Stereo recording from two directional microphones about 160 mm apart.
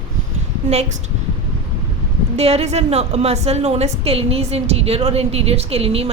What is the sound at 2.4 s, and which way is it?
A woman's voice, 40° right (ahead or behind).